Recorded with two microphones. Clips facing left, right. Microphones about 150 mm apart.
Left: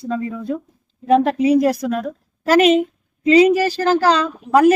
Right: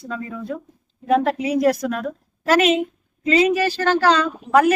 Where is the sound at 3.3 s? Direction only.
35° left (ahead or behind).